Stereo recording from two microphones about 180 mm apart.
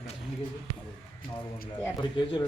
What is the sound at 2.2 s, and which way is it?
Speech, 25° left (ahead or behind).